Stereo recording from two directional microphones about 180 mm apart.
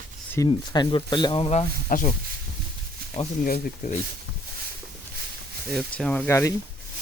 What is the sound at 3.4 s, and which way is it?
Speech, 50° left (ahead or behind).